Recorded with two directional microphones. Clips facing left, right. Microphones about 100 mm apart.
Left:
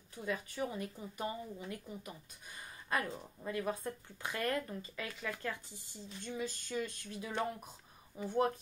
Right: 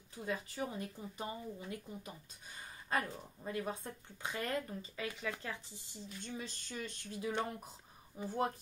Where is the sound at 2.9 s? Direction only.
30° right (ahead or behind).